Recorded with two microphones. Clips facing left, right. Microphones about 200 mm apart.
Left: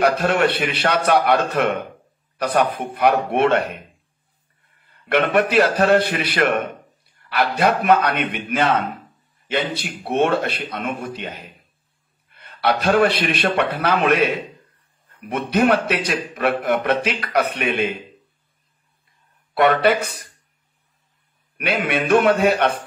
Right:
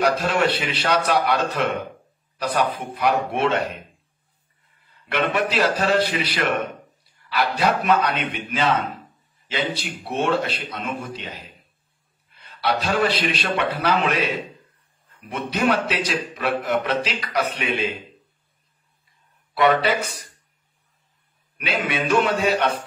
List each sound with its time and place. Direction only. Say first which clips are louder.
0.0 s a man's voice: left 3 dB; 55° left (ahead or behind)
5.0 s a man's voice: left 5 dB; 55° left (ahead or behind)
10.0 s a man's voice: left 4 dB; 60° left (ahead or behind)
19.5 s a man's voice: left 3 dB; 55° left (ahead or behind)
21.5 s a man's voice: left 3 dB; 55° left (ahead or behind)